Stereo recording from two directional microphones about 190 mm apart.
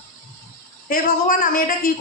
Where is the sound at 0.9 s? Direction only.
50° left (ahead or behind).